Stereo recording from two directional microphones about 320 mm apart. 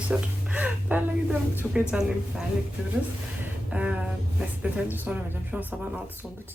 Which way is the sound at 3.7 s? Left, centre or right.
Centre.